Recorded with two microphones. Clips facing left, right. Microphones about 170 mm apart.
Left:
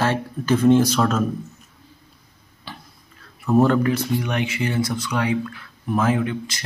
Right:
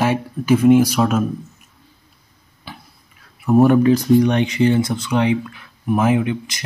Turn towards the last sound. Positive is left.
turn(degrees=-20)  # may be behind; listen again after turning